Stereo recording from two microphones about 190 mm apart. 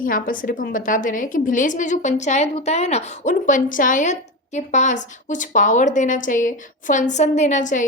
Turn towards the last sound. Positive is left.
turn(degrees=40)  # may be behind; listen again after turning